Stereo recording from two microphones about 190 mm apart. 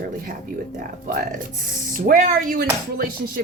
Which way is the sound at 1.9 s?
45° right (ahead or behind).